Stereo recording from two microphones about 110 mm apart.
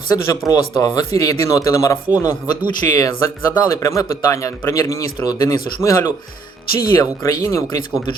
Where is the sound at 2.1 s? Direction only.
15° right (ahead or behind).